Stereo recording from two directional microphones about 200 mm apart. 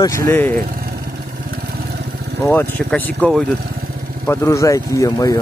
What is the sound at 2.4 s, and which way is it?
Speech, 10° left (ahead or behind).